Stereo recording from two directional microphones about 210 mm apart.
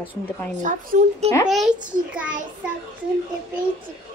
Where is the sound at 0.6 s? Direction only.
35° right (ahead or behind).